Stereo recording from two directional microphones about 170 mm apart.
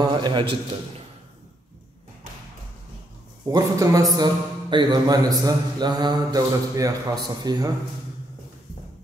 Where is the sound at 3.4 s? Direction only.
20° right (ahead or behind).